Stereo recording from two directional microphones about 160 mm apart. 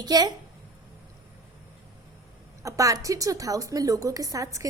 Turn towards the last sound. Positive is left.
turn(degrees=-20)  # may be behind; listen again after turning